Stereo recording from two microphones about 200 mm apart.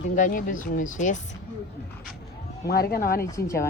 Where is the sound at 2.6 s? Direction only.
50° left (ahead or behind).